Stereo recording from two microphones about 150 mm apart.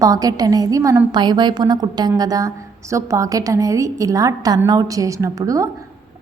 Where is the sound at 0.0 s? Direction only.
25° right (ahead or behind).